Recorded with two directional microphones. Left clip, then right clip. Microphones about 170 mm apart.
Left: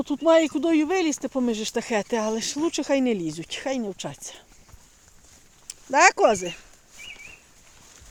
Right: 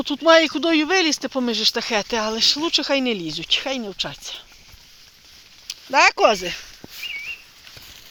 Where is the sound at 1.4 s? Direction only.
20° left (ahead or behind).